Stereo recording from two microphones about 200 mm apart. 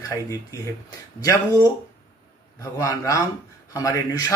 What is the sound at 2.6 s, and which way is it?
Speech, 15° left (ahead or behind).